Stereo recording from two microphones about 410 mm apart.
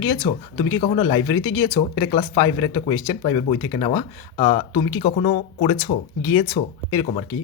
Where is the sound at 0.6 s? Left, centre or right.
Left.